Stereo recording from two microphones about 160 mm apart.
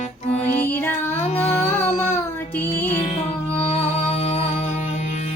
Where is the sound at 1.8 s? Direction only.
15° left (ahead or behind).